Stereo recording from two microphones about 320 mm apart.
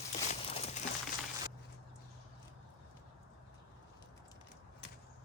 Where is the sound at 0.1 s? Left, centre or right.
Centre.